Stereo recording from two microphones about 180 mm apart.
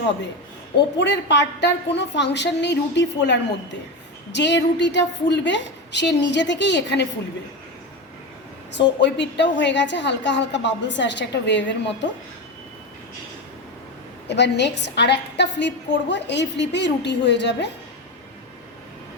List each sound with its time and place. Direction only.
0.9 s a woman's voice: 75° left (ahead or behind)
9.0 s a woman's voice: 75° left (ahead or behind)
14.3 s a woman's voice: 70° left (ahead or behind)